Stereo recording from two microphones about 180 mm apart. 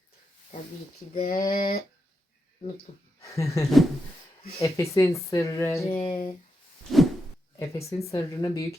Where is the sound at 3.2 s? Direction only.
15° left (ahead or behind).